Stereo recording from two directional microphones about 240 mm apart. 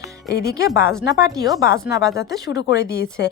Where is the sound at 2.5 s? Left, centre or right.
Left.